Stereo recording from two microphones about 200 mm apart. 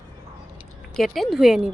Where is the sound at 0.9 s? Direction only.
Centre (ahead or behind).